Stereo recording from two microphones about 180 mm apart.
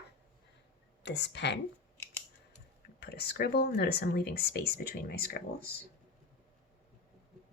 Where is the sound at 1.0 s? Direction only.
75° left (ahead or behind); by 5.3 s 55° left (ahead or behind).